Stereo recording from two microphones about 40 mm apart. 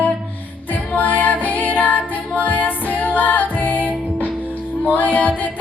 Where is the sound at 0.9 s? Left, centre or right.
Left.